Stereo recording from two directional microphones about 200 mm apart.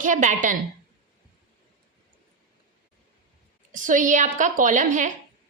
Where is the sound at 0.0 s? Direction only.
40° right (ahead or behind).